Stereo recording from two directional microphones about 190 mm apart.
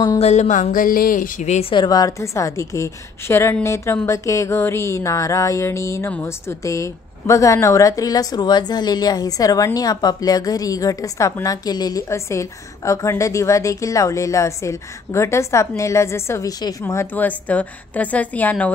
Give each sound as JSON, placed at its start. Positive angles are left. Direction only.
{"t": 0.2, "sound": "speech", "side_deg": 35}